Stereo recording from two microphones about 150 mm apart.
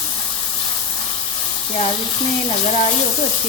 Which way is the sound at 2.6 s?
45° left (ahead or behind).